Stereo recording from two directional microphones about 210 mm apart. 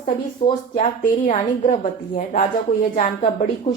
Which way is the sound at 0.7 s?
35° left (ahead or behind).